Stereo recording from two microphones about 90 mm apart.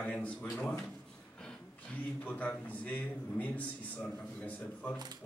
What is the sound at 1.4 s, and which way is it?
A man's voice, 15° left (ahead or behind).